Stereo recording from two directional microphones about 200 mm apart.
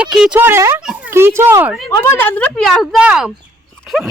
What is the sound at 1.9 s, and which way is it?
A woman's voice, 15° left (ahead or behind).